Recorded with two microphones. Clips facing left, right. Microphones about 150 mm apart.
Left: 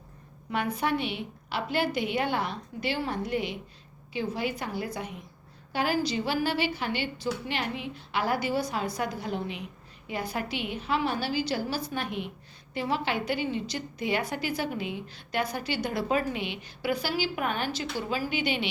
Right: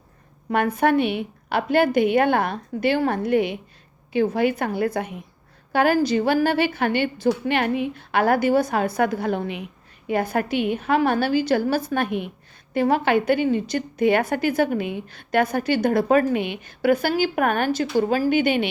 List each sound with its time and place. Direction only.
0.5 s a woman's voice: 55° right (ahead or behind)